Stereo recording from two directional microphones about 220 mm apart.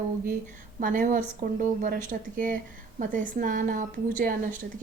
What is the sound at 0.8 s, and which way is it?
A woman's voice, 40° right (ahead or behind).